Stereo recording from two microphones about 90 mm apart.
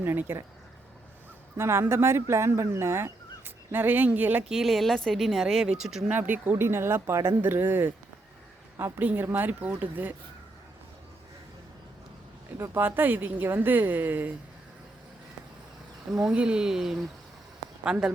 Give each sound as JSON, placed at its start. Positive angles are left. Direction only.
{"t": 0.0, "sound": "speech", "side_deg": -25}
{"t": 1.5, "sound": "speech", "side_deg": -30}
{"t": 4.4, "sound": "speech", "side_deg": 0}
{"t": 6.1, "sound": "speech", "side_deg": -20}
{"t": 12.5, "sound": "speech", "side_deg": -25}
{"t": 16.2, "sound": "speech", "side_deg": -10}